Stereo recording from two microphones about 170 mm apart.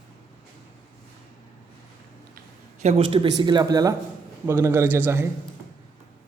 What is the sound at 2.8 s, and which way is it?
A man's voice, 35° right (ahead or behind).